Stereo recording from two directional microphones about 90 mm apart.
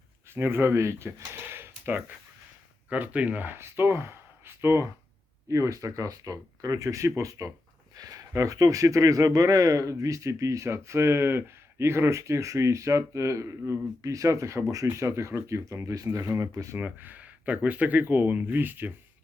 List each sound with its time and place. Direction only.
0.3 s speech: 25° right (ahead or behind)
16.7 s speech: 20° right (ahead or behind)